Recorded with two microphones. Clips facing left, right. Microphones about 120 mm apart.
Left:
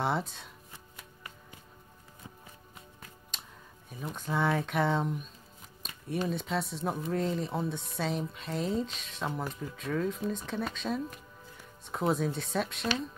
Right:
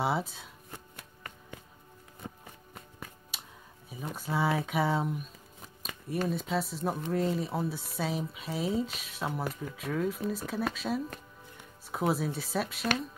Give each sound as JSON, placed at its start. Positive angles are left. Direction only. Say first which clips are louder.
{"t": 0.0, "sound": "speech", "louder": "right 1 dB", "side_deg": -5}
{"t": 0.7, "sound": "chopping", "louder": "right 3 dB", "side_deg": -55}
{"t": 2.2, "sound": "music", "louder": "right 6 dB", "side_deg": -65}
{"t": 3.3, "sound": "music", "louder": "even", "side_deg": -5}
{"t": 3.9, "sound": "speech", "louder": "even", "side_deg": -5}
{"t": 6.2, "sound": "speech", "louder": "right 2 dB", "side_deg": 0}